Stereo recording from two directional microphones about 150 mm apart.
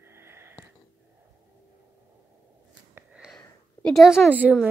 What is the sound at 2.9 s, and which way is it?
Sniff, 5° right (ahead or behind).